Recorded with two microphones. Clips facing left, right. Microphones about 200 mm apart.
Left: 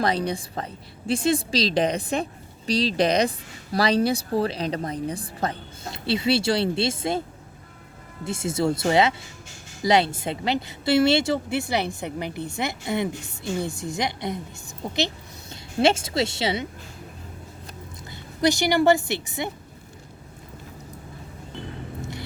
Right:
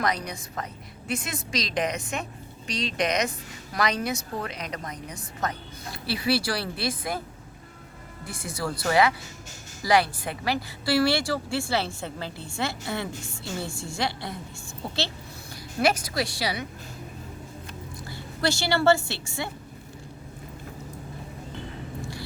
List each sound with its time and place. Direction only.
0.0 s a woman's voice: 30° left (ahead or behind)
8.2 s a woman's voice: 25° left (ahead or behind)
18.1 s a woman's voice: 15° left (ahead or behind)